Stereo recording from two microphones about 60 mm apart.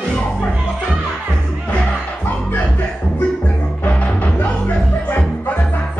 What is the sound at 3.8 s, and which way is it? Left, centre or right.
Music, left.